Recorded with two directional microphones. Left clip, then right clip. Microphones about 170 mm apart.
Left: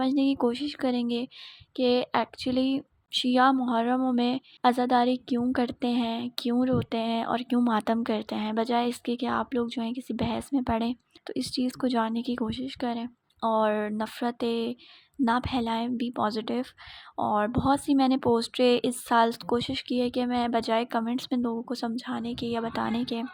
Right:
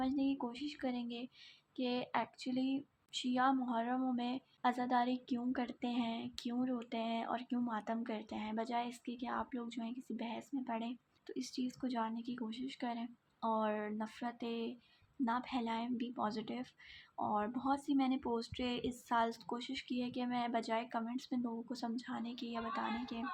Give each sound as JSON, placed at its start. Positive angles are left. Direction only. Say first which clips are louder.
{"t": 0.0, "sound": "a woman's voice", "louder": "left 13 dB", "side_deg": 60}